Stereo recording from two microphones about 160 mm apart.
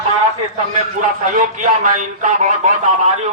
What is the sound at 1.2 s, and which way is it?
A man's voice, 55° right (ahead or behind).